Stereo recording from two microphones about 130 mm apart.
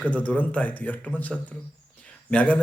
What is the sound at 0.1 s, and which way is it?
A man's voice, 10° left (ahead or behind).